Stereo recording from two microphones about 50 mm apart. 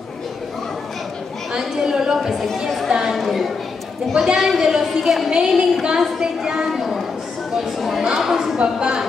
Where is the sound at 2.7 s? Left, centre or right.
Centre.